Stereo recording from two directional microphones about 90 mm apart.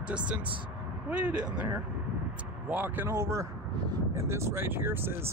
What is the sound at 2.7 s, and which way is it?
Speech, 15° right (ahead or behind).